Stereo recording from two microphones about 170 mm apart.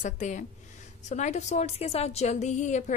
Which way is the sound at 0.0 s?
45° left (ahead or behind).